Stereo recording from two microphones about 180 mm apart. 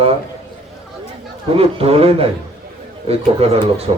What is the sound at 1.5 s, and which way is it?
A man's voice, 30° right (ahead or behind).